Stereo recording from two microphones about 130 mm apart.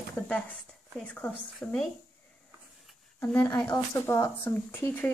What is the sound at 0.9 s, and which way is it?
Speech, 5° left (ahead or behind).